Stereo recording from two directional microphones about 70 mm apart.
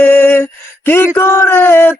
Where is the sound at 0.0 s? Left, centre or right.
Left.